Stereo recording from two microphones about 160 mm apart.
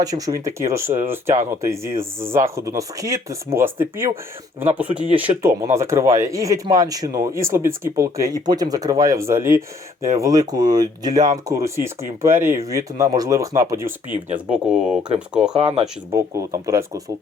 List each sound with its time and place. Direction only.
0.0 s speech: 20° right (ahead or behind)
14.3 s speech: 5° right (ahead or behind)
15.5 s speech: 35° right (ahead or behind)
16.1 s speech: 20° right (ahead or behind)